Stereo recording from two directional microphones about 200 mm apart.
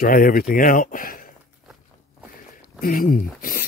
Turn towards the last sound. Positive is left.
turn(degrees=45)  # may be behind; listen again after turning